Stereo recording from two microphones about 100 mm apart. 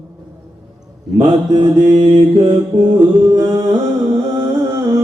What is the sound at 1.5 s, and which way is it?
Mantra, 45° right (ahead or behind).